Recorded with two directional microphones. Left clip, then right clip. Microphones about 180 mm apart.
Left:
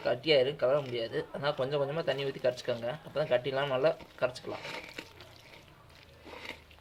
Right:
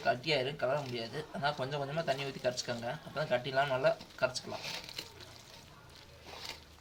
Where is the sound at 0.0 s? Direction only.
55° left (ahead or behind).